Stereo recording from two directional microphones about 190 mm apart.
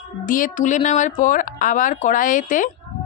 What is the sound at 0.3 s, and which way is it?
Speech, 45° left (ahead or behind).